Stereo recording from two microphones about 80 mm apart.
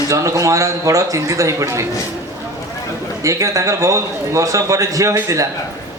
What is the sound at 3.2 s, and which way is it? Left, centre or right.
A man's voice, right.